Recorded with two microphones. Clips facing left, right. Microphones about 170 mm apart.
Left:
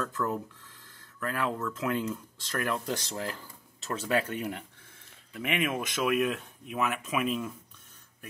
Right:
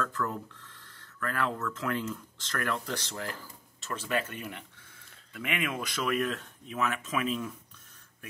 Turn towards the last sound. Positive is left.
turn(degrees=5)  # may be behind; listen again after turning